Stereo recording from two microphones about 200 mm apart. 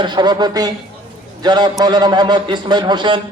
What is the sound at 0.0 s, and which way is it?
Speech, 20° right (ahead or behind).